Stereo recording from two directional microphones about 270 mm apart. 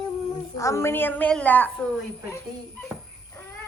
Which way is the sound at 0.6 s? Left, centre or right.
Centre.